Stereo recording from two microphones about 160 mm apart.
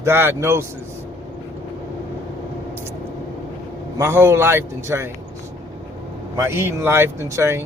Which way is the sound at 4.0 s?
15° right (ahead or behind).